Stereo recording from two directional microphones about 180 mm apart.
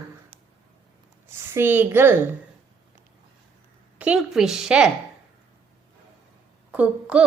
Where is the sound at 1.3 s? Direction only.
10° right (ahead or behind).